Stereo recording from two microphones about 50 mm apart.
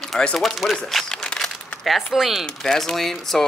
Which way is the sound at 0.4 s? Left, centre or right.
Centre.